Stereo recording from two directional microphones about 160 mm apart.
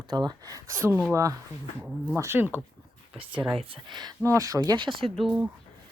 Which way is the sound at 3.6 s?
30° right (ahead or behind).